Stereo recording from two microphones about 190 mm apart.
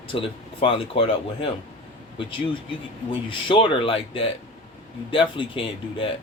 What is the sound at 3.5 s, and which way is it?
Speech, 25° left (ahead or behind).